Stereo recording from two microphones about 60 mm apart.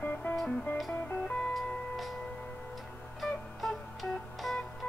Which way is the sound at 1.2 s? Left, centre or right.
Centre.